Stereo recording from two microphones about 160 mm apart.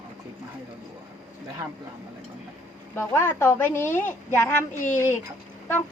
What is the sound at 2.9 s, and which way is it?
Speech, 15° left (ahead or behind).